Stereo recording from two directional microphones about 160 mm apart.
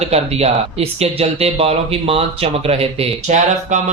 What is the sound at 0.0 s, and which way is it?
A man's voice, 40° right (ahead or behind).